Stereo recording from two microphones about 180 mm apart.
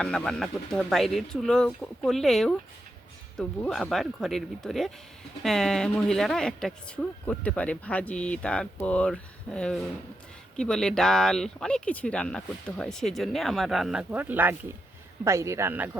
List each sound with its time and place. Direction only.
0.0 s speech: 5° left (ahead or behind)